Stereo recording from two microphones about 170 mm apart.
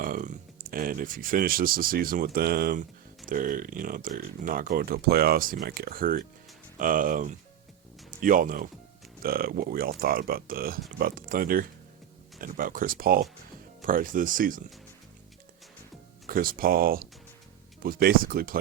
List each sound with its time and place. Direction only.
0.0 s speech: 55° right (ahead or behind)
16.3 s speech: 60° right (ahead or behind)